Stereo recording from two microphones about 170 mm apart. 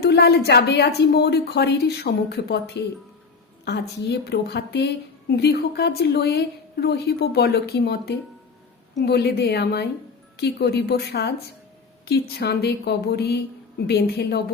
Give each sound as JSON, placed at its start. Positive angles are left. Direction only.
{"t": 0.0, "sound": "a woman's voice", "side_deg": 75}